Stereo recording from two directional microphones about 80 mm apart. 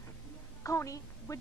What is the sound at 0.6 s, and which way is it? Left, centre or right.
Speech, left.